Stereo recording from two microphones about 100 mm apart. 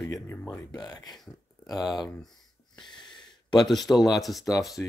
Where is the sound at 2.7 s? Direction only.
50° left (ahead or behind).